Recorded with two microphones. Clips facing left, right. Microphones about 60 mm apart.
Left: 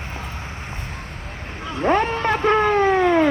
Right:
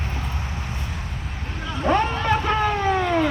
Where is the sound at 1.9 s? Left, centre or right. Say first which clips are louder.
Left 1 dB; left.